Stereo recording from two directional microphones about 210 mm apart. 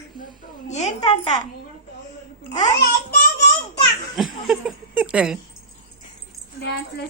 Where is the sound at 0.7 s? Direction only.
35° left (ahead or behind).